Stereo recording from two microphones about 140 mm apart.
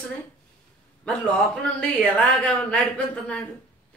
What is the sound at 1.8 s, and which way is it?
A woman's voice, 10° left (ahead or behind).